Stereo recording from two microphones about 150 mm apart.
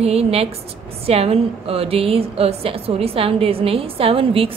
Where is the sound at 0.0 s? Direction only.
45° right (ahead or behind).